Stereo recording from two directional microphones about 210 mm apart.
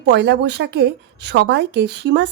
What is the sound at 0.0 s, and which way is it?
A woman's voice, 55° right (ahead or behind).